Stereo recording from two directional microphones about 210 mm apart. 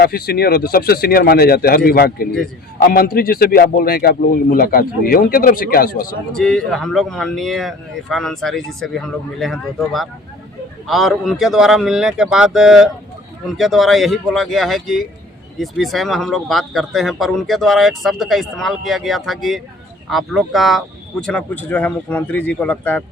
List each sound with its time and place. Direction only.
0.0 s a man's voice: 50° left (ahead or behind)
6.3 s a man's voice: 5° left (ahead or behind)